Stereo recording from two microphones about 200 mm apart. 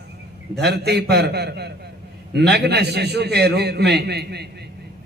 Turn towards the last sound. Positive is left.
turn(degrees=-55)  # may be behind; listen again after turning